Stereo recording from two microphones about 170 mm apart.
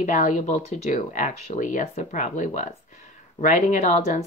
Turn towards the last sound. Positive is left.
turn(degrees=45)  # may be behind; listen again after turning